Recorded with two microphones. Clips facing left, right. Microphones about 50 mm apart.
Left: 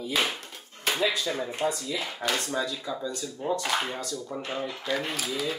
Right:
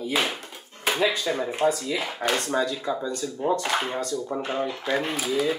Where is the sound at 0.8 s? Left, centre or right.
Centre.